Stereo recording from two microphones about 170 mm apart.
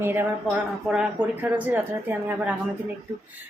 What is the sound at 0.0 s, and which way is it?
Speech, 10° right (ahead or behind).